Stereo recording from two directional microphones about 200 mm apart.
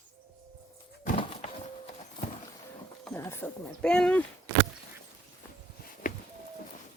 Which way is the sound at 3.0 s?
10° left (ahead or behind).